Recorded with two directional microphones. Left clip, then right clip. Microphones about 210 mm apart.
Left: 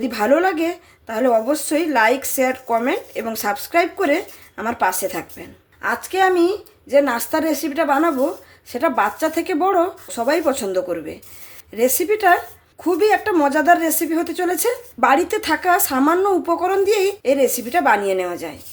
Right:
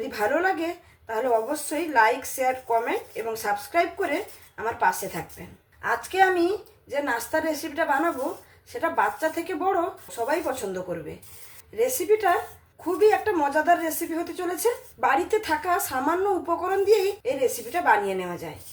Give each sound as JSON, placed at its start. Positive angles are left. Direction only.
{"t": 0.1, "sound": "a woman's voice", "side_deg": 45}
{"t": 11.8, "sound": "a woman's voice", "side_deg": 50}